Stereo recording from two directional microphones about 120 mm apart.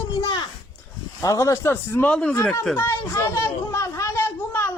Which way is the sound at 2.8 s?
20° left (ahead or behind).